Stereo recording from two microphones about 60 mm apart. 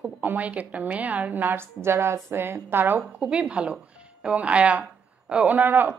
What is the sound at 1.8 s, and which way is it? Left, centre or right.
A woman's voice, right.